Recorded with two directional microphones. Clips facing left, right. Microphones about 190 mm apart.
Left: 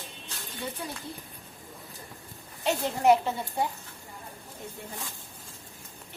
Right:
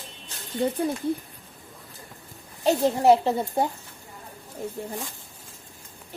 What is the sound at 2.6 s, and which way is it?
A child's voice, 35° right (ahead or behind).